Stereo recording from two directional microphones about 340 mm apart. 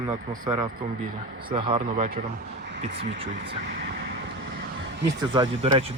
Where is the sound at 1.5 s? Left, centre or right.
Centre.